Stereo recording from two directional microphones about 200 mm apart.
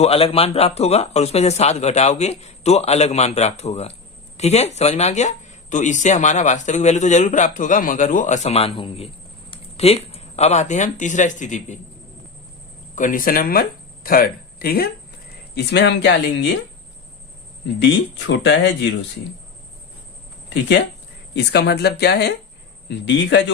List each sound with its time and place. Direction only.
0.0 s speech: 30° left (ahead or behind)
13.0 s speech: 45° left (ahead or behind); by 16.5 s 60° left (ahead or behind)
18.3 s speech: 60° left (ahead or behind)
21.3 s speech: 55° left (ahead or behind)